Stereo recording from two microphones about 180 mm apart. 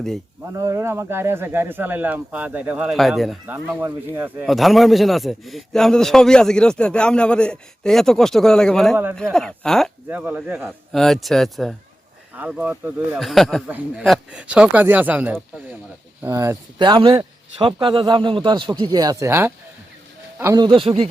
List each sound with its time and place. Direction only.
0.4 s speech: 15° right (ahead or behind); by 3.5 s centre (ahead or behind)
3.7 s speech: 10° right (ahead or behind)
4.4 s a man's voice: centre (ahead or behind)
10.1 s a man's voice: 10° right (ahead or behind)
16.7 s a man's voice: 25° right (ahead or behind)
20.7 s speech: 30° right (ahead or behind)